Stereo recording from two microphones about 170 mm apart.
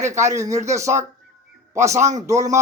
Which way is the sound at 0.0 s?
15° right (ahead or behind).